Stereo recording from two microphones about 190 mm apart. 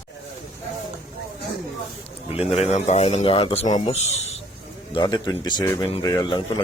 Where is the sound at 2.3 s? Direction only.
30° left (ahead or behind).